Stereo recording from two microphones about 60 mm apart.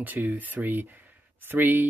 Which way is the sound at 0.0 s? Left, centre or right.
Right.